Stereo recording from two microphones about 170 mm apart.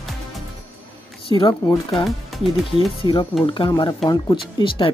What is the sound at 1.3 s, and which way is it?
Speech, 30° left (ahead or behind).